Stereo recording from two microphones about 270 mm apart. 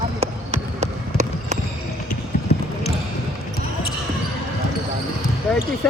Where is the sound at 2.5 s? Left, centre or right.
Left.